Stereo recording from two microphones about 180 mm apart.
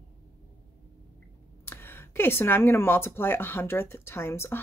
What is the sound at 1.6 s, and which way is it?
Speech, 15° left (ahead or behind).